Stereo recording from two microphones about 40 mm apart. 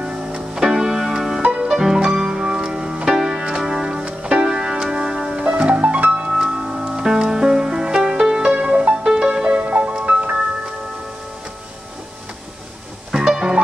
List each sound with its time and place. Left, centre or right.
0.0 s music: right
1.4 s music: right
1.7 s music: centre
4.0 s music: right
8.6 s music: right
9.7 s music: right
13.1 s music: centre